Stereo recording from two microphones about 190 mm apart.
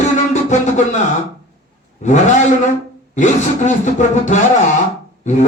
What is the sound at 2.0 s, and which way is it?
Speech, 40° left (ahead or behind).